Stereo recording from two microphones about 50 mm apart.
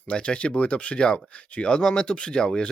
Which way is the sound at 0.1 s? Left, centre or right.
Left.